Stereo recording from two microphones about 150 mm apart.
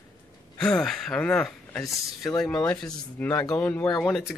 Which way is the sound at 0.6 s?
5° left (ahead or behind).